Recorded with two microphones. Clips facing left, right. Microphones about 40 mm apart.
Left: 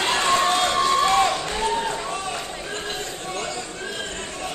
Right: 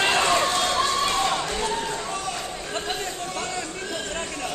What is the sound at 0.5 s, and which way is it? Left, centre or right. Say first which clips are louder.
Run: left 3 dB; centre.